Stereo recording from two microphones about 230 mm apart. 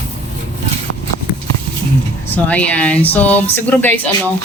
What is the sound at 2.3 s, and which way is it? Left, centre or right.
Speech, centre.